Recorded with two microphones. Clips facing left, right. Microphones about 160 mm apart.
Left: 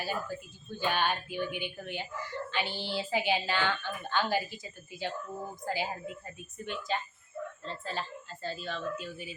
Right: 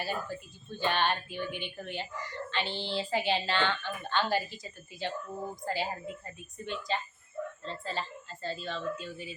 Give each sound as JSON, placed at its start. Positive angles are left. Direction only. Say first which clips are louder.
{"t": 0.0, "sound": "speech", "louder": "even", "side_deg": 5}
{"t": 2.6, "sound": "speech", "louder": "right 1 dB", "side_deg": -25}
{"t": 2.9, "sound": "speech", "louder": "even", "side_deg": 5}